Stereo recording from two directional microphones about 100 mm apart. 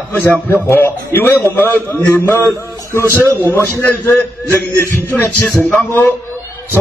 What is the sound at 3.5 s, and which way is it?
A man's voice, 20° left (ahead or behind).